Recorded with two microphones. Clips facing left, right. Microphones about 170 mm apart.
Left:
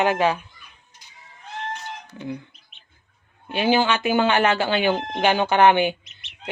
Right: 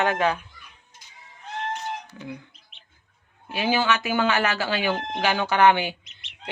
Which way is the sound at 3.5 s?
30° left (ahead or behind).